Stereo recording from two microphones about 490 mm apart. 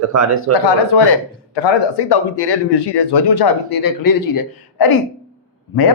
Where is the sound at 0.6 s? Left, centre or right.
Left.